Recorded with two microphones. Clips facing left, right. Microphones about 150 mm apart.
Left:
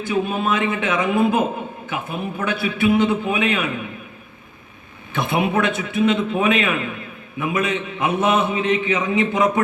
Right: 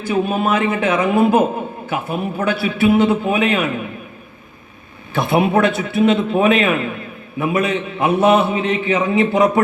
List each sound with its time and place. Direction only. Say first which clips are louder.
0.1 s a man's voice: right 4 dB; 40° right (ahead or behind)
5.3 s a man's voice: right 5 dB; 35° right (ahead or behind)